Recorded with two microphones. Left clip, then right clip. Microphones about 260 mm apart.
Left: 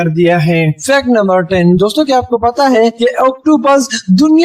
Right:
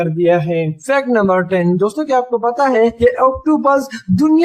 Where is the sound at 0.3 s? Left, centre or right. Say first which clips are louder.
Even; left.